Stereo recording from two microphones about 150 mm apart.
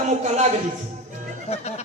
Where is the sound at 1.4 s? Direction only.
45° left (ahead or behind).